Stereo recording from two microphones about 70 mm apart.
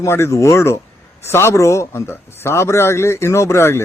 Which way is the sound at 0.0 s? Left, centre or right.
Left.